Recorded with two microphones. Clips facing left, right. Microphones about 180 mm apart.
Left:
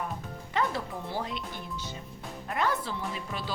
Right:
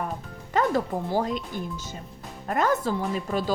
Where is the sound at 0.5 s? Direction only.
45° right (ahead or behind).